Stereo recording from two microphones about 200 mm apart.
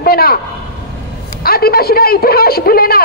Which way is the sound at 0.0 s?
50° left (ahead or behind).